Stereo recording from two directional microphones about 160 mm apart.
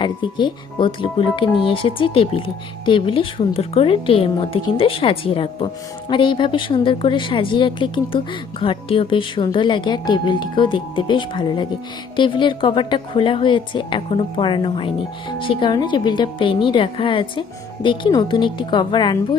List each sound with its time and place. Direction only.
0.0 s a woman's voice: 30° left (ahead or behind)